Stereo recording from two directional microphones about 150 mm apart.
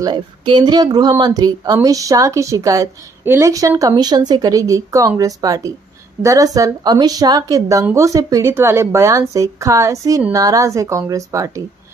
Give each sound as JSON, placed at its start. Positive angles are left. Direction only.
{"t": 0.0, "sound": "a woman's voice", "side_deg": -30}